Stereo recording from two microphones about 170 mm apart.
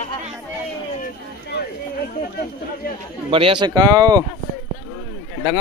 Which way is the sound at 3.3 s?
30° right (ahead or behind).